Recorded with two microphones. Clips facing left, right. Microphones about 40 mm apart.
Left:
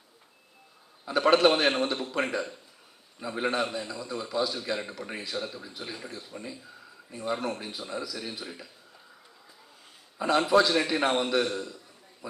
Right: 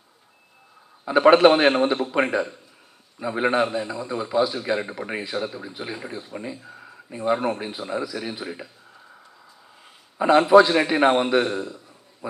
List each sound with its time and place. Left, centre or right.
1.0 s a man's voice: right
6.7 s a sound: right
7.3 s a man's voice: centre
10.2 s a man's voice: right
12.2 s a man's voice: right